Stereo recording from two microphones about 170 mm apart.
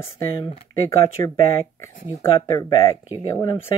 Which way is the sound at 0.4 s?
15° left (ahead or behind).